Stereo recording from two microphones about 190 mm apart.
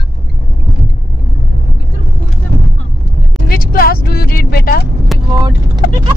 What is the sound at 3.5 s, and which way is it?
Speech, 50° left (ahead or behind).